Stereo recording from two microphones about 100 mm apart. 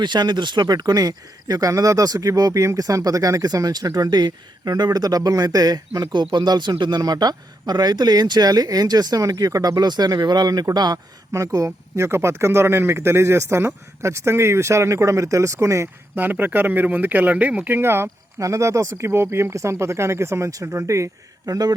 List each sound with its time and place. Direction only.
0.0 s speech: 50° right (ahead or behind); by 15.9 s 30° right (ahead or behind)
16.1 s speech: 20° right (ahead or behind); by 21.7 s 35° right (ahead or behind)